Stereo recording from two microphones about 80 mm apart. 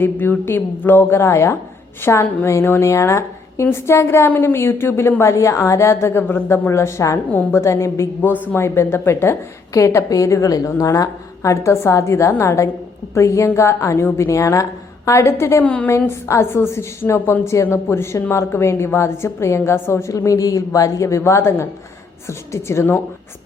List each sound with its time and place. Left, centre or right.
0.0 s a woman's voice: left
7.3 s a woman's voice: centre
7.5 s a woman's voice: left
15.6 s a woman's voice: centre
15.9 s a woman's voice: left